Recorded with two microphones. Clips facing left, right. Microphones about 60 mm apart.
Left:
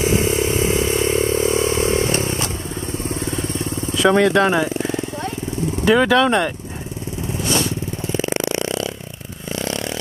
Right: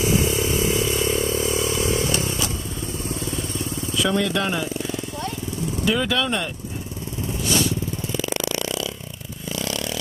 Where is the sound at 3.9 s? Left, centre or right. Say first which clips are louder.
Left 8 dB; left.